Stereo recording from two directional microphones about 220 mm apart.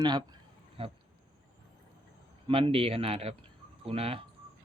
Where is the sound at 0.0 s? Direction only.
20° right (ahead or behind).